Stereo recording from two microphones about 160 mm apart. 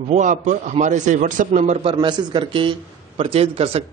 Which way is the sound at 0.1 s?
50° right (ahead or behind).